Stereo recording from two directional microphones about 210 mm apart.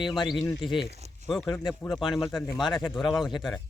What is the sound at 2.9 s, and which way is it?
Speech, centre (ahead or behind).